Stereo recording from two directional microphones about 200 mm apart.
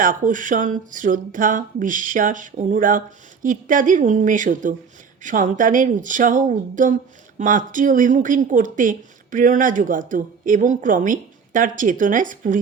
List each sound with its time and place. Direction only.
0.0 s speech: 40° right (ahead or behind)